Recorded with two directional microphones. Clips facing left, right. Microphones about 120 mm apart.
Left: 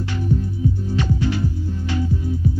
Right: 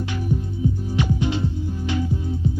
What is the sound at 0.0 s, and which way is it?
Music, 15° right (ahead or behind).